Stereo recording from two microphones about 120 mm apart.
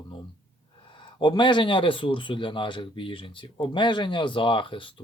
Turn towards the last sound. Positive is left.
turn(degrees=45)  # may be behind; listen again after turning